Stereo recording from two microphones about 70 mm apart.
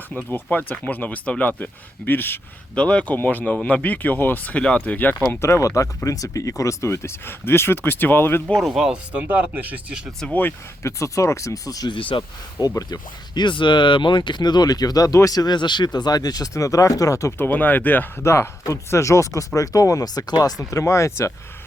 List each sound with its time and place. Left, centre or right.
0.2 s speech: left
2.7 s speech: centre
4.5 s speech: centre
5.4 s speech: left
8.5 s speech: centre
9.2 s speech: right
10.8 s speech: left
12.9 s speech: left
17.3 s speech: left
18.3 s speech: left